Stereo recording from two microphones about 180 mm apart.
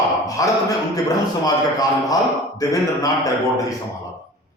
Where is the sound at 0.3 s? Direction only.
20° left (ahead or behind).